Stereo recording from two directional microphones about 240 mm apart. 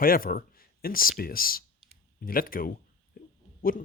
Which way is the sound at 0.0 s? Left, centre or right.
Left.